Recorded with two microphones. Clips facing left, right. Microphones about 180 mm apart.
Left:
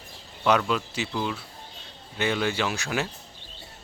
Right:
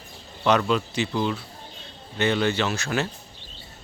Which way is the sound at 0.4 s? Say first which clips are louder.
Right 2 dB; 5° left (ahead or behind).